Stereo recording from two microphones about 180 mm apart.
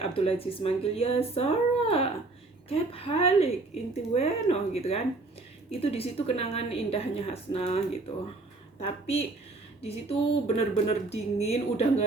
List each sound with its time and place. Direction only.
0.1 s speech: 30° left (ahead or behind)
8.8 s speech: 35° left (ahead or behind)